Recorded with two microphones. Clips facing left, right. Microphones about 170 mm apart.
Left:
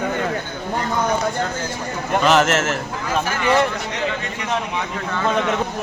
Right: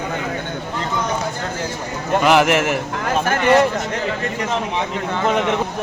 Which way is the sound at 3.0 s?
50° right (ahead or behind).